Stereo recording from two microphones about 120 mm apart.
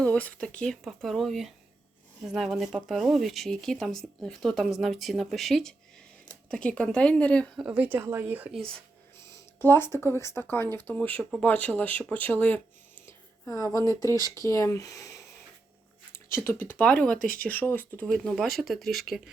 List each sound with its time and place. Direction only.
0.0 s speech: 10° left (ahead or behind)
7.6 s a woman's voice: 10° right (ahead or behind)
9.6 s speech: 20° left (ahead or behind)
13.5 s speech: 25° left (ahead or behind); by 19.2 s centre (ahead or behind)